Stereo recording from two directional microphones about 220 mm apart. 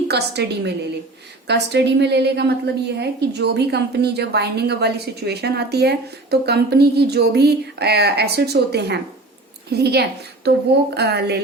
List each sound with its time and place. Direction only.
0.1 s a woman's voice: 50° right (ahead or behind)